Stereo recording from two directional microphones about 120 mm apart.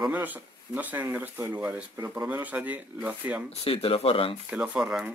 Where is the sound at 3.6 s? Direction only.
55° left (ahead or behind).